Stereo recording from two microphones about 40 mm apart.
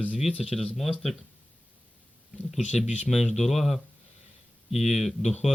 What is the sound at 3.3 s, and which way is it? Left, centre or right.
Speech, centre.